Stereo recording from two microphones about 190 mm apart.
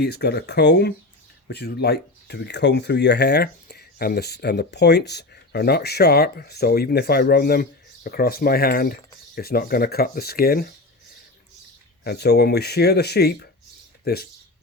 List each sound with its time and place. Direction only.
0.0 s speech: 55° left (ahead or behind)
12.0 s speech: 60° left (ahead or behind)